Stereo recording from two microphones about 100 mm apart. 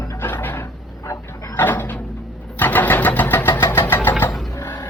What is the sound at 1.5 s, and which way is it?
Bird, 20° left (ahead or behind).